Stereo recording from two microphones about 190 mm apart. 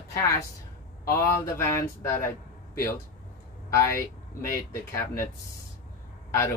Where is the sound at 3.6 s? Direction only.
15° left (ahead or behind).